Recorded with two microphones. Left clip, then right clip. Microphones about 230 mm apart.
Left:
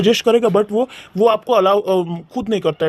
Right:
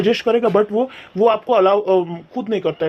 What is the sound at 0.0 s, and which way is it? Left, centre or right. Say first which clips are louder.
Speech: left 2 dB; left.